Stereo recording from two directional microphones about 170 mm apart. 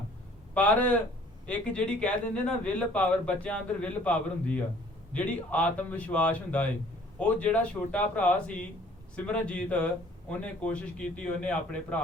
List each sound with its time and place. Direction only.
0.5 s speech: 10° left (ahead or behind)